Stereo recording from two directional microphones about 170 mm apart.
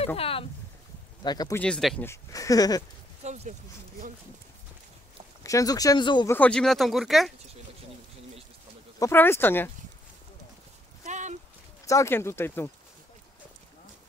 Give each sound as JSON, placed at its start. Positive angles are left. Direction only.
{"t": 0.0, "sound": "speech", "side_deg": 35}
{"t": 1.2, "sound": "speech", "side_deg": 25}
{"t": 1.6, "sound": "speech", "side_deg": 5}
{"t": 2.0, "sound": "speech", "side_deg": 20}
{"t": 3.3, "sound": "speech", "side_deg": -40}
{"t": 5.4, "sound": "speech", "side_deg": 20}
{"t": 6.2, "sound": "speech", "side_deg": 10}
{"t": 9.0, "sound": "speech", "side_deg": 15}
{"t": 11.1, "sound": "a sound", "side_deg": -45}
{"t": 11.8, "sound": "speech", "side_deg": 20}